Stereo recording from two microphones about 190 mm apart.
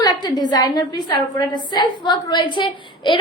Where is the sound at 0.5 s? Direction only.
20° left (ahead or behind).